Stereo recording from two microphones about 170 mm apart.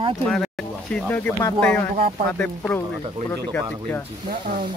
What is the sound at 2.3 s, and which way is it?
Speech, 10° left (ahead or behind).